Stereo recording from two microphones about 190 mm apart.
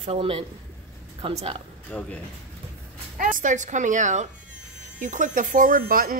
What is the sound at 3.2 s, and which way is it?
Speech, 45° right (ahead or behind).